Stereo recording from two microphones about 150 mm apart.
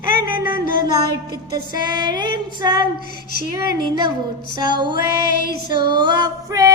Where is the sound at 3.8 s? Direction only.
30° right (ahead or behind).